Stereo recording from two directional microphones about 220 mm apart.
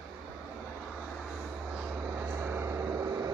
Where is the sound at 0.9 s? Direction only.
Centre (ahead or behind).